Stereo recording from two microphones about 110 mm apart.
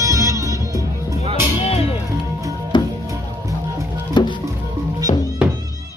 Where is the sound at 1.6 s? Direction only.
65° left (ahead or behind).